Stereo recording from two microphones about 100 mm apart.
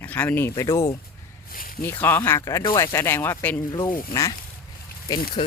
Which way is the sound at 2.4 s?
35° left (ahead or behind).